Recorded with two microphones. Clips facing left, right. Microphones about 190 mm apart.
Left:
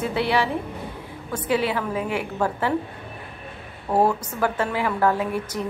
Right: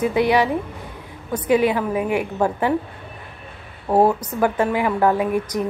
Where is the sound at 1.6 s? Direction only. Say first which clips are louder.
Right 5 dB; 15° right (ahead or behind).